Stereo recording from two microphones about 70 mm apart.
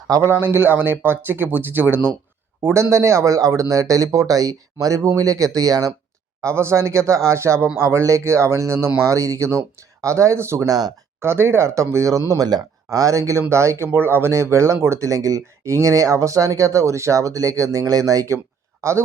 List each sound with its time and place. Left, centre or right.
0.2 s speech: right
2.7 s speech: right
6.4 s speech: right
9.0 s speech: right
10.7 s speech: right
11.2 s speech: right
12.3 s speech: right
12.9 s speech: right
18.8 s speech: right